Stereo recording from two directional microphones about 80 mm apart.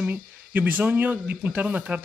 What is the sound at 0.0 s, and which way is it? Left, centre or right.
Speech, right.